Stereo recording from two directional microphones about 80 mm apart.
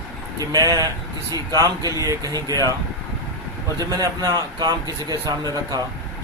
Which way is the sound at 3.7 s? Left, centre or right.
Right.